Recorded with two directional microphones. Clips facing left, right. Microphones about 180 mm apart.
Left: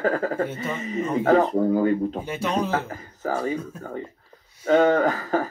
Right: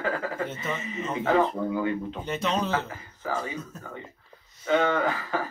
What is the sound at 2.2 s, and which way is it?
Speech, 10° left (ahead or behind).